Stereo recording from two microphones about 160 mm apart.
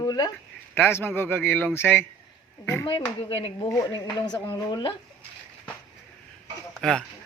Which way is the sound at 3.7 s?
25° left (ahead or behind).